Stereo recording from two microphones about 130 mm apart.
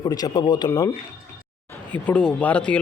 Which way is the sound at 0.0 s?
30° left (ahead or behind).